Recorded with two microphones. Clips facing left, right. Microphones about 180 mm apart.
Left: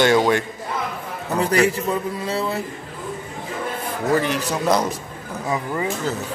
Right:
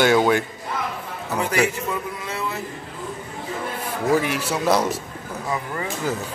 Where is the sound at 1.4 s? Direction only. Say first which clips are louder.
Left 4 dB; 35° left (ahead or behind).